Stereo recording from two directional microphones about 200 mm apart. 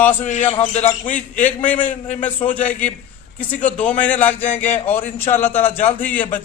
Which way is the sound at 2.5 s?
5° left (ahead or behind).